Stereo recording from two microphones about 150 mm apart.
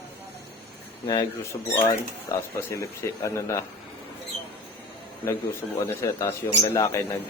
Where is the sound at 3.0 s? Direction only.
20° left (ahead or behind).